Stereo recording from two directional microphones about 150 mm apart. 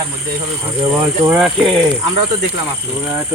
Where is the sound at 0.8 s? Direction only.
20° right (ahead or behind).